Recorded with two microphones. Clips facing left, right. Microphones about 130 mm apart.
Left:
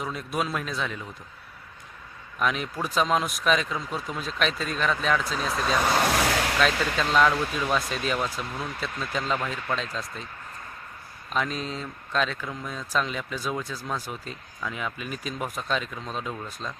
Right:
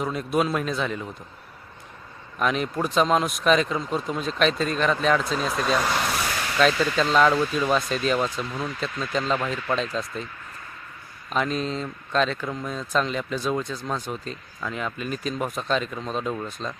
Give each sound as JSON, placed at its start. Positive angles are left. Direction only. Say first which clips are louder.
{"t": 0.0, "sound": "speech", "louder": "right 5 dB", "side_deg": 0}
{"t": 2.4, "sound": "speech", "louder": "right 3 dB", "side_deg": 0}
{"t": 6.2, "sound": "vehicle", "louder": "left 4 dB", "side_deg": 85}
{"t": 6.9, "sound": "speech", "louder": "right 3 dB", "side_deg": 5}
{"t": 11.3, "sound": "speech", "louder": "right 4 dB", "side_deg": 0}